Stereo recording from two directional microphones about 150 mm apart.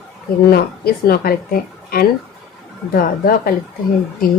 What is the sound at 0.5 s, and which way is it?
Speech, 90° left.